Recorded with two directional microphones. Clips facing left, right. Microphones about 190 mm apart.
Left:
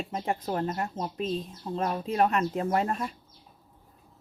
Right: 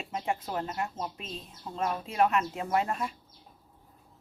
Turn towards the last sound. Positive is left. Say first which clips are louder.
# left 2 dB
turn(degrees=35)  # may be behind; listen again after turning